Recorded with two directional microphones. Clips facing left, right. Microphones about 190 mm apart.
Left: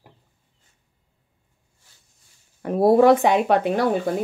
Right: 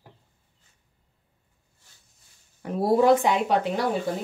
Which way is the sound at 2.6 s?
60° left (ahead or behind).